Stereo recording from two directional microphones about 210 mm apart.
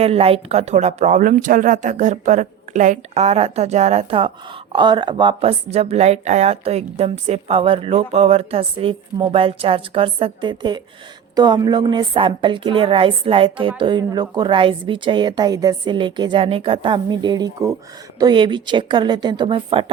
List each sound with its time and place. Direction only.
0.0 s a woman's voice: 30° right (ahead or behind)